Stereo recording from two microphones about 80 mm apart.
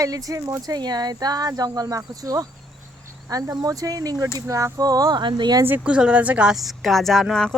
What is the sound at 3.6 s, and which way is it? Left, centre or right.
Speech, right.